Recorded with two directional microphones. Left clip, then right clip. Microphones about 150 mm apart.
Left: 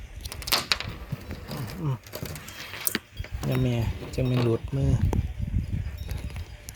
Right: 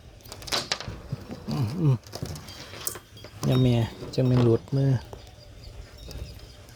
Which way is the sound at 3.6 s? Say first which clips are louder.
Right 4 dB; 30° right (ahead or behind).